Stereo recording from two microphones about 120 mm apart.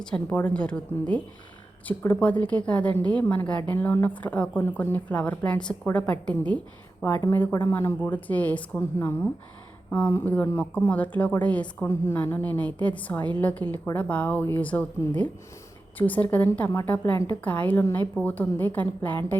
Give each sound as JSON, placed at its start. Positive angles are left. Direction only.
{"t": 0.0, "sound": "a woman's voice", "side_deg": 10}
{"t": 2.9, "sound": "a woman's voice", "side_deg": -40}
{"t": 3.2, "sound": "a woman's voice", "side_deg": 10}